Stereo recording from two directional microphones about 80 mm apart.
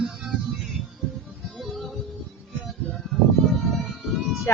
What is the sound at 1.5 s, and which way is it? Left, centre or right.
Music, centre.